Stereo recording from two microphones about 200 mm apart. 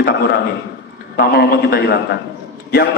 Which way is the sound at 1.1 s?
50° left (ahead or behind).